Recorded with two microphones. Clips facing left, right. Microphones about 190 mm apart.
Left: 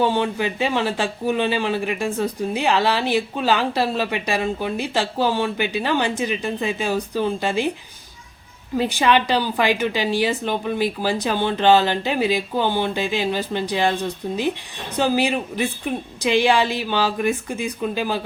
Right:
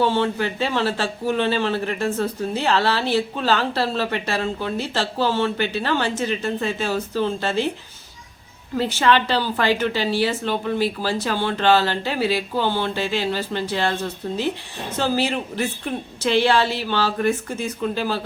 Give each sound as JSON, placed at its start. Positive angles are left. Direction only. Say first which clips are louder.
{"t": 0.0, "sound": "speech", "louder": "even", "side_deg": 15}
{"t": 8.8, "sound": "speech", "louder": "even", "side_deg": 15}